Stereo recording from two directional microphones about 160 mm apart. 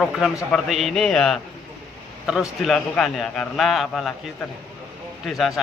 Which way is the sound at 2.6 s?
Centre (ahead or behind).